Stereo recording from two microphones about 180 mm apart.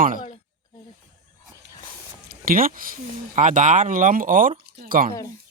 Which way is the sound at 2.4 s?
55° right (ahead or behind).